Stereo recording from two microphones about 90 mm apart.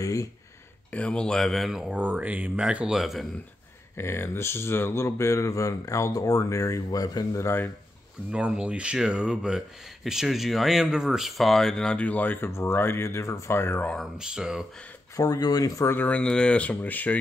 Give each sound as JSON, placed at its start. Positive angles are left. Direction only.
{"t": 0.0, "sound": "a sound", "side_deg": 40}
{"t": 0.9, "sound": "speech", "side_deg": 10}
{"t": 2.0, "sound": "speech", "side_deg": -15}
{"t": 3.9, "sound": "speech", "side_deg": 30}
{"t": 7.4, "sound": "speech", "side_deg": 25}
{"t": 8.3, "sound": "speech", "side_deg": -10}
{"t": 14.1, "sound": "speech", "side_deg": -10}
{"t": 15.1, "sound": "speech", "side_deg": 40}
{"t": 15.9, "sound": "speech", "side_deg": 15}